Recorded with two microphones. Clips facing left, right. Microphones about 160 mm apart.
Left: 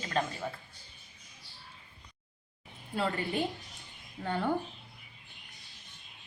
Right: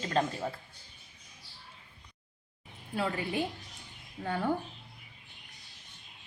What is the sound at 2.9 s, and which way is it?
Speech, 5° right (ahead or behind).